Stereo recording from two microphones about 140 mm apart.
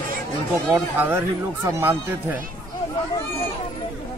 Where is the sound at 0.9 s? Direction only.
15° right (ahead or behind).